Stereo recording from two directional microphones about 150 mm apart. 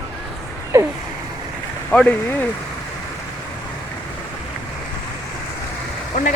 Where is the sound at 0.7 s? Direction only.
20° right (ahead or behind).